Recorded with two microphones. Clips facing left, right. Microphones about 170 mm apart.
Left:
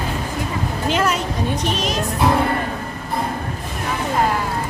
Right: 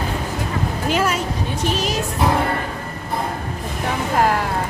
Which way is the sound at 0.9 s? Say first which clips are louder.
Left 1 dB; 5° right (ahead or behind).